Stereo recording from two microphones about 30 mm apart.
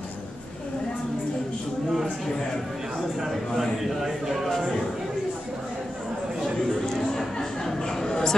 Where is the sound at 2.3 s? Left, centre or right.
Centre.